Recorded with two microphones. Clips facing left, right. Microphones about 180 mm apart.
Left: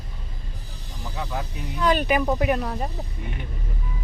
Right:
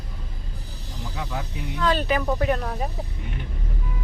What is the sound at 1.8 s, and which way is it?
Speech, 15° left (ahead or behind).